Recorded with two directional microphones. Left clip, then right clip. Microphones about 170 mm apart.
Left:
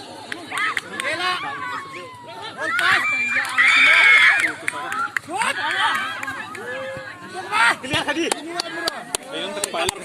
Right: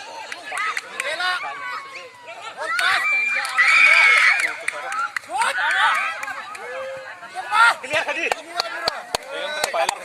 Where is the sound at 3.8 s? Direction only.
40° right (ahead or behind).